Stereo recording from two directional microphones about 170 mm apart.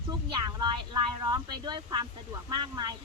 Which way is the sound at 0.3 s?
30° right (ahead or behind).